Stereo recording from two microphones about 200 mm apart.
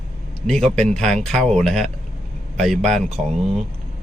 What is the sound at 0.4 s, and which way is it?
Speech, centre (ahead or behind).